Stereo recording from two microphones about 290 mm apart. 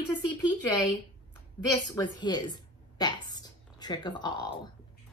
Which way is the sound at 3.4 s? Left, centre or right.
Centre.